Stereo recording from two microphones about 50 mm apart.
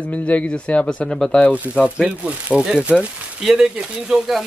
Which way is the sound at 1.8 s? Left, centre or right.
Right.